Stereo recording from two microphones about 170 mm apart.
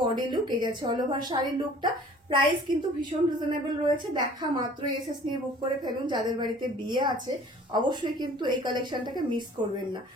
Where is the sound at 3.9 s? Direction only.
25° right (ahead or behind).